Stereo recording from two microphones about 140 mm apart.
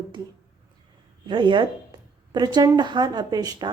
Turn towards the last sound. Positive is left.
turn(degrees=-30)  # may be behind; listen again after turning